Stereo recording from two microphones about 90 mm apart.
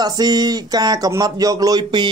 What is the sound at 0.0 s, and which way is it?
Speech, 45° right (ahead or behind).